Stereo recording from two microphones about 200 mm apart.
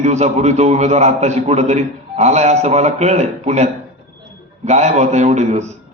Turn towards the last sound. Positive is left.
turn(degrees=-35)  # may be behind; listen again after turning